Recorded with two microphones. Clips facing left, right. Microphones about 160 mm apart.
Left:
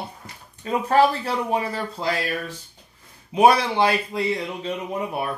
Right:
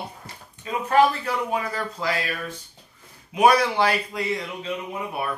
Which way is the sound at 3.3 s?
25° left (ahead or behind).